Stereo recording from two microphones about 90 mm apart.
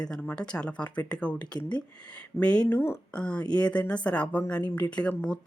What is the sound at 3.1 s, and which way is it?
Speech, 10° left (ahead or behind).